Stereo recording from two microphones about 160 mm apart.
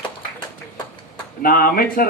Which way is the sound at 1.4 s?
65° left (ahead or behind).